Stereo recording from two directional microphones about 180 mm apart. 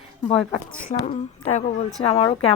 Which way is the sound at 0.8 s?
45° left (ahead or behind).